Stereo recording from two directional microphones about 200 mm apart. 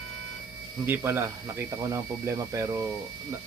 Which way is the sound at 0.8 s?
10° right (ahead or behind).